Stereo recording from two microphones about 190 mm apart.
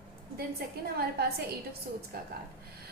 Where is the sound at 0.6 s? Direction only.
55° right (ahead or behind).